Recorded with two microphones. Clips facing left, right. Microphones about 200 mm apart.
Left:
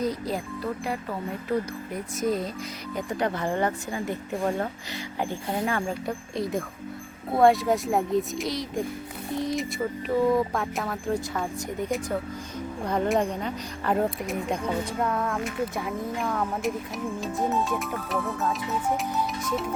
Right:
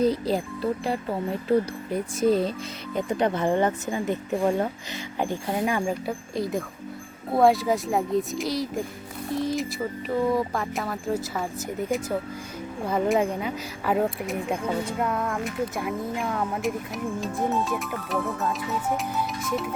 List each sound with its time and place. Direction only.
0.0 s speech: 30° right (ahead or behind)
5.2 s speech: 15° right (ahead or behind)
6.1 s a woman's voice: centre (ahead or behind)